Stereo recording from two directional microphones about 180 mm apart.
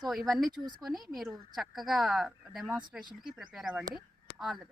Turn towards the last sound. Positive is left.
turn(degrees=0)  # may be behind; listen again after turning